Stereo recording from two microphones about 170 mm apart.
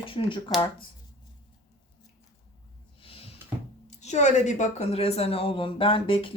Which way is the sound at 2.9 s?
35° left (ahead or behind).